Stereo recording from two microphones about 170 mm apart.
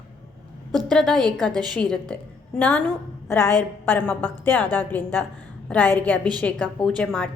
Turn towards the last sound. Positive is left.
turn(degrees=5)  # may be behind; listen again after turning